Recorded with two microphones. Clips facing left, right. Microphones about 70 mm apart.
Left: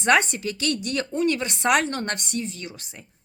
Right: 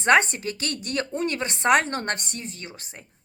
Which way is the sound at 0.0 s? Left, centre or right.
Right.